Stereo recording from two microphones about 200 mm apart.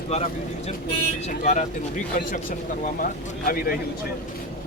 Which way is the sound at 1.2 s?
35° left (ahead or behind).